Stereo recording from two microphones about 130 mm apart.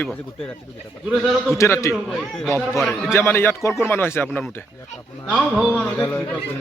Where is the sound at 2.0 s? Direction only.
Centre (ahead or behind).